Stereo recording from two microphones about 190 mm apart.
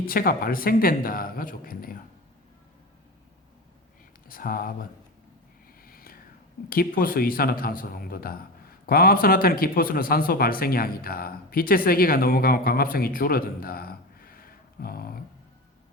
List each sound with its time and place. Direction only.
0.0 s speech: 50° left (ahead or behind)
4.3 s speech: 50° left (ahead or behind)
5.8 s a sound: 50° left (ahead or behind)
6.7 s speech: 50° left (ahead or behind)